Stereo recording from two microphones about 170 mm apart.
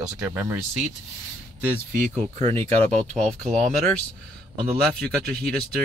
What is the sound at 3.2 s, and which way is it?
Speech, 45° right (ahead or behind).